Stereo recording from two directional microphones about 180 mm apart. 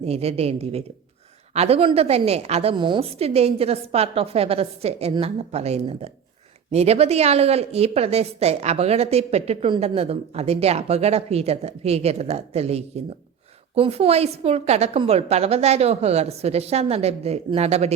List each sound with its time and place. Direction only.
0.0 s a woman's voice: 35° right (ahead or behind)